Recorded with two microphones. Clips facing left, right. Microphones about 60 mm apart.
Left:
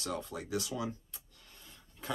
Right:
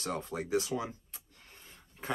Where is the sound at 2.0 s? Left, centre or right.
Right.